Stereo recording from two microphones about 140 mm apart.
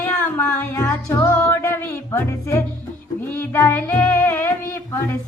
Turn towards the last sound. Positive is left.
turn(degrees=15)  # may be behind; listen again after turning